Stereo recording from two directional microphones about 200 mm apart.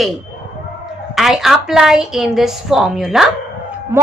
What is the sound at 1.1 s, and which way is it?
A woman's voice, centre (ahead or behind).